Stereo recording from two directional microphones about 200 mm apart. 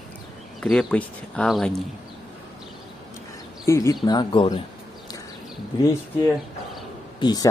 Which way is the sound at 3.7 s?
15° left (ahead or behind).